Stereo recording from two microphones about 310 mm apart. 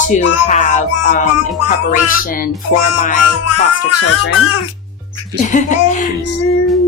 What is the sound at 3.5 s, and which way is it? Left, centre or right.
Music, left.